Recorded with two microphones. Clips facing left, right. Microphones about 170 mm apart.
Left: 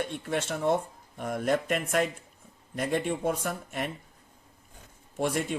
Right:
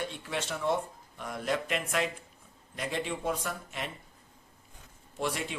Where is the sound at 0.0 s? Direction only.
50° left (ahead or behind).